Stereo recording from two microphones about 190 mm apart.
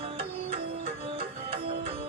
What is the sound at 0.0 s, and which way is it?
Music, 30° right (ahead or behind).